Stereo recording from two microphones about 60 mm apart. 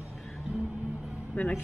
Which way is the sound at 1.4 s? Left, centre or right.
Left.